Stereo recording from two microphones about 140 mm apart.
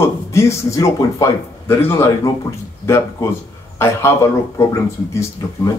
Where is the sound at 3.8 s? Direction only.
20° left (ahead or behind).